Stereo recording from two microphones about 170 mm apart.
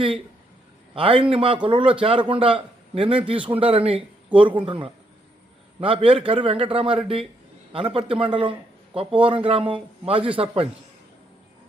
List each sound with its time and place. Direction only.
0.9 s a man's voice: 30° right (ahead or behind)